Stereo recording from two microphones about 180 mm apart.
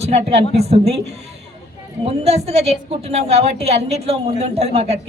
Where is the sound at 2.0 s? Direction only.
35° right (ahead or behind).